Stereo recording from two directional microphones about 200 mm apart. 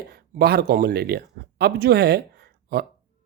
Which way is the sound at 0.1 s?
50° right (ahead or behind).